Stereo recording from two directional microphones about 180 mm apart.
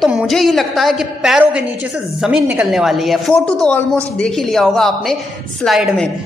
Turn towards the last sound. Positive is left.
turn(degrees=0)  # may be behind; listen again after turning